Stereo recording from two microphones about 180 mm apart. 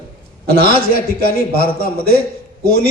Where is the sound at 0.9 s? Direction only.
55° left (ahead or behind).